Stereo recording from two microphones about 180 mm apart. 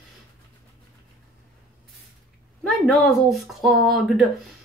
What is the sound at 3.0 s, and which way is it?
Speech, centre (ahead or behind).